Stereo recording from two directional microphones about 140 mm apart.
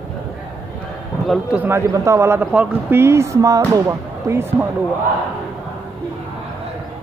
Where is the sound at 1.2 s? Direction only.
Centre (ahead or behind).